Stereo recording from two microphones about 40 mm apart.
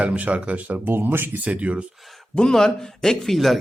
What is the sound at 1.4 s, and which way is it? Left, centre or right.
Speech, right.